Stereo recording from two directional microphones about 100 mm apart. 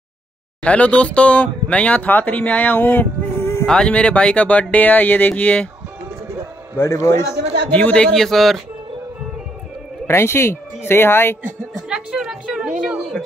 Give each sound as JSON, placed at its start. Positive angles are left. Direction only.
{"t": 0.7, "sound": "speech", "side_deg": 10}
{"t": 3.6, "sound": "speech", "side_deg": 10}
{"t": 6.8, "sound": "speech", "side_deg": 30}
{"t": 7.7, "sound": "speech", "side_deg": 10}
{"t": 10.0, "sound": "speech", "side_deg": 25}
{"t": 11.7, "sound": "a woman's voice", "side_deg": -5}